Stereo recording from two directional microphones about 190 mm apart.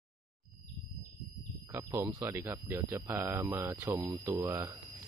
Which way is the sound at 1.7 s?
15° right (ahead or behind).